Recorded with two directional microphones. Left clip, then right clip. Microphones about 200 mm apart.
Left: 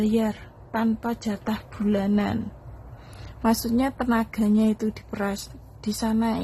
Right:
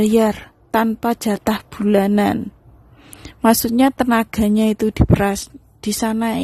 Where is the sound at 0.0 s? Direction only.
55° right (ahead or behind).